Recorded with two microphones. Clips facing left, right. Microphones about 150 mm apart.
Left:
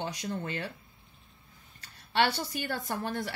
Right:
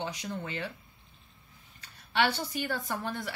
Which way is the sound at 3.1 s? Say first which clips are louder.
Left 2 dB; 45° left (ahead or behind).